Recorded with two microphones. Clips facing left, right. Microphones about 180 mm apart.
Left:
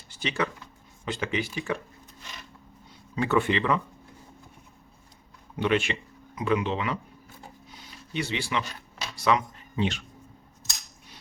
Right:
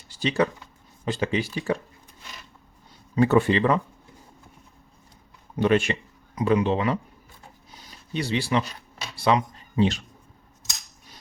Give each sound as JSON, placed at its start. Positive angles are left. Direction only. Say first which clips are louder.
{"t": 0.1, "sound": "speech", "louder": "right 6 dB", "side_deg": -35}
{"t": 3.2, "sound": "speech", "louder": "right 5 dB", "side_deg": -35}
{"t": 5.5, "sound": "speech", "louder": "right 4 dB", "side_deg": -45}
{"t": 8.1, "sound": "speech", "louder": "right 5 dB", "side_deg": -35}